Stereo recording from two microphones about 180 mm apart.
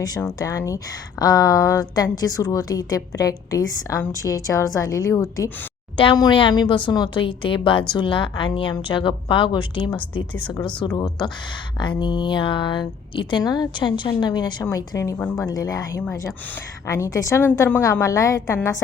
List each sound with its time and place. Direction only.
0.0 s a woman's voice: 20° left (ahead or behind)
10.5 s a woman's voice: 5° left (ahead or behind)
10.8 s a woman's voice: 20° left (ahead or behind)